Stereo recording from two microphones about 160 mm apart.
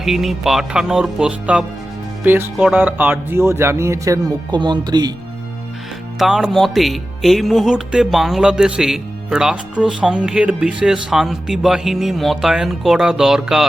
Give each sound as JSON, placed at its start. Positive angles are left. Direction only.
{"t": 0.0, "sound": "speech", "side_deg": 0}
{"t": 6.1, "sound": "speech", "side_deg": 0}